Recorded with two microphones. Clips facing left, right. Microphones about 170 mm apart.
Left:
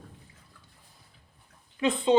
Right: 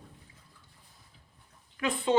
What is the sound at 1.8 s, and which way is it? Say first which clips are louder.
Speech: left 4 dB; 20° left (ahead or behind).